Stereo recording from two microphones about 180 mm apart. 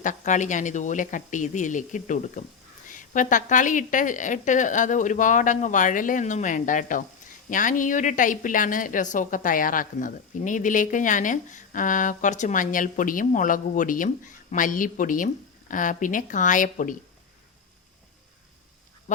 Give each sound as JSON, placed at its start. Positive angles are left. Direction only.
{"t": 0.0, "sound": "a woman's voice", "side_deg": 45}